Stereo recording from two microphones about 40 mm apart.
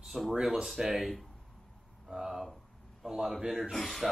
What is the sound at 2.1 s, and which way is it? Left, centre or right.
Speech, centre.